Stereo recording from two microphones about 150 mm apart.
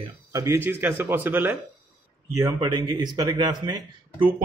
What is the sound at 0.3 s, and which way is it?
A man's voice, 20° right (ahead or behind).